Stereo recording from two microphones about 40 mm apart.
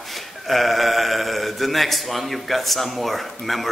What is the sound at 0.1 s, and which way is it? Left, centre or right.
A man's voice, centre.